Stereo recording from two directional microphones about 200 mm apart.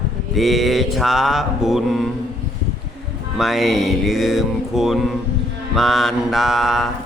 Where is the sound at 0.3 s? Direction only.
Centre (ahead or behind).